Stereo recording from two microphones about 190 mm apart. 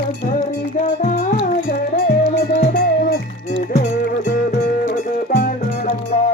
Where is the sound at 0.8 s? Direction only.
40° left (ahead or behind); by 2.9 s 60° left (ahead or behind).